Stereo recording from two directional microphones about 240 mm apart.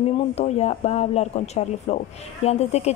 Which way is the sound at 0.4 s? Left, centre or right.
Left.